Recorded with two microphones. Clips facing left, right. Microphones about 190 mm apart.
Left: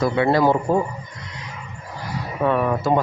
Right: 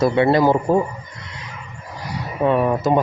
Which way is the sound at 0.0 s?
25° right (ahead or behind).